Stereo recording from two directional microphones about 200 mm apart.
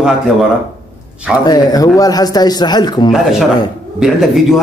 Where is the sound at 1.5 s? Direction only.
20° left (ahead or behind).